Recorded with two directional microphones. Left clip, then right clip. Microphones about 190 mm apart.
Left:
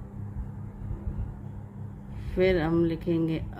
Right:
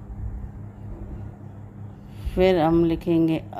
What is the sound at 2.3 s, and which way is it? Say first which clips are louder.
Speech: right 6 dB; 30° right (ahead or behind).